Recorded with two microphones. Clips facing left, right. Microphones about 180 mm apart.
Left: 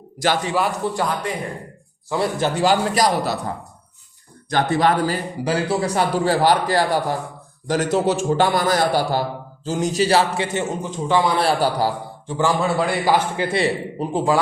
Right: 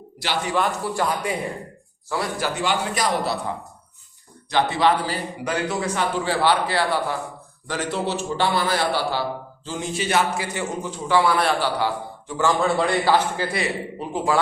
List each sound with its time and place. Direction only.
0.2 s a man's voice: 45° left (ahead or behind)
0.8 s a man's voice: 25° left (ahead or behind)
2.0 s a man's voice: 25° left (ahead or behind)
2.6 s a man's voice: 40° left (ahead or behind)
5.5 s a man's voice: 30° left (ahead or behind)
11.3 s a man's voice: 35° left (ahead or behind)
12.4 s a man's voice: 10° left (ahead or behind)
13.6 s a man's voice: 30° left (ahead or behind)